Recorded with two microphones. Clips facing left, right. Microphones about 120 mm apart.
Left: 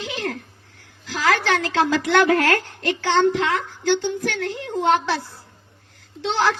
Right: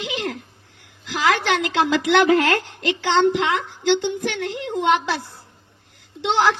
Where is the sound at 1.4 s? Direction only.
15° right (ahead or behind).